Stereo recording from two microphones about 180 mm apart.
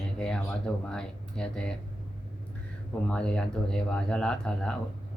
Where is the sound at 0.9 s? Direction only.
5° left (ahead or behind).